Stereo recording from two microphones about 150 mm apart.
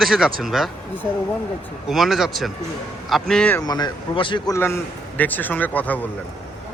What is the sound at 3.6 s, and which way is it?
Speech, 30° left (ahead or behind).